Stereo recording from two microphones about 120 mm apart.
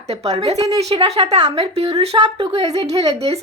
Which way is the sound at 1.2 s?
60° right (ahead or behind).